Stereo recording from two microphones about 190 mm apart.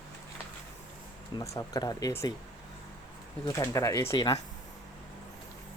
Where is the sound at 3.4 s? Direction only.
15° left (ahead or behind).